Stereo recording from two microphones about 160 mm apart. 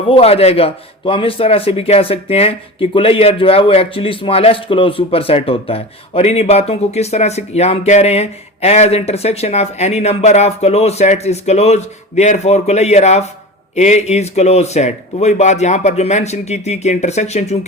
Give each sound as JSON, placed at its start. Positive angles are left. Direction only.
{"t": 0.1, "sound": "a man's voice", "side_deg": 40}